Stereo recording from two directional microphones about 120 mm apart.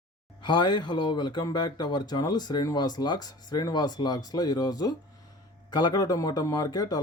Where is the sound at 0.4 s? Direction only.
40° left (ahead or behind).